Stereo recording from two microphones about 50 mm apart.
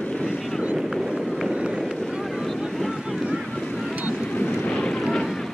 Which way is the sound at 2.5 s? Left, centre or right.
Centre.